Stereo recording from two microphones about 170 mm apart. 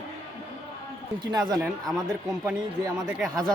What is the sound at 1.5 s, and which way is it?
Speech, centre (ahead or behind).